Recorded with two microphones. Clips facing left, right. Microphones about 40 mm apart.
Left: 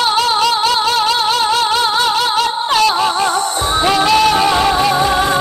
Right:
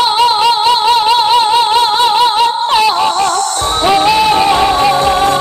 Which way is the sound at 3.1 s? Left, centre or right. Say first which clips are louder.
Right 3 dB; centre.